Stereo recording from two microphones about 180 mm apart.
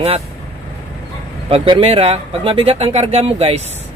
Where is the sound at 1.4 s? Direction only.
30° right (ahead or behind).